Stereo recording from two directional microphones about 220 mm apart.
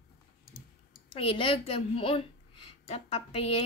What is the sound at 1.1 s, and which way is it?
A woman's voice, 25° left (ahead or behind).